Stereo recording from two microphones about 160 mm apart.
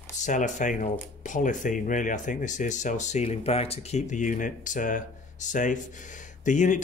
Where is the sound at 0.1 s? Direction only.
50° left (ahead or behind).